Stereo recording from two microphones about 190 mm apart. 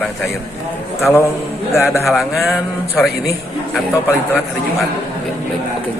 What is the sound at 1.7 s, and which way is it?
Speech, 15° left (ahead or behind).